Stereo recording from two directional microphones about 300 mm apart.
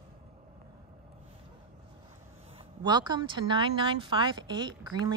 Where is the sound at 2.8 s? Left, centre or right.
Centre.